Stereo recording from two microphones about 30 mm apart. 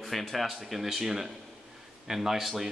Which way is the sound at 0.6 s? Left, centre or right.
Centre.